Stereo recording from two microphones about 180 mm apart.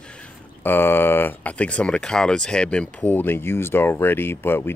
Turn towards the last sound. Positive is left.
turn(degrees=10)  # may be behind; listen again after turning